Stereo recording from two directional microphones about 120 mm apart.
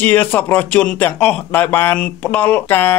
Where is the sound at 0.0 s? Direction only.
15° left (ahead or behind).